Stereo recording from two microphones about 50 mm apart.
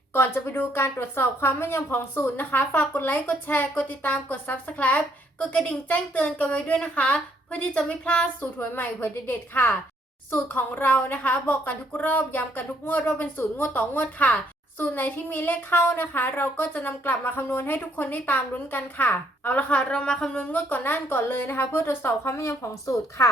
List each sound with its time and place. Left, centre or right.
0.4 s a woman's voice: left
8.7 s a woman's voice: left
17.7 s a woman's voice: left
19.7 s a woman's voice: left
20.3 s a woman's voice: left